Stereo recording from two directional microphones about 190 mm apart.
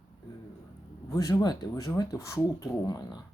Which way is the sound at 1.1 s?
20° left (ahead or behind).